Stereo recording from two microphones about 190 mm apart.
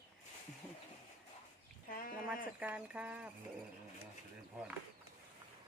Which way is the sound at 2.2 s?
5° right (ahead or behind).